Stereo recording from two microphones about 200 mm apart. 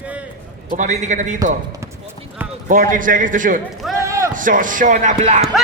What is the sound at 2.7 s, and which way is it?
Speech, 40° right (ahead or behind).